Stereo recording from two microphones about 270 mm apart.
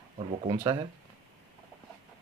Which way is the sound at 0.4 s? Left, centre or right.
Centre.